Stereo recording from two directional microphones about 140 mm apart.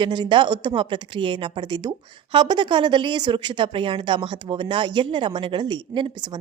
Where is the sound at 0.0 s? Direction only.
35° right (ahead or behind).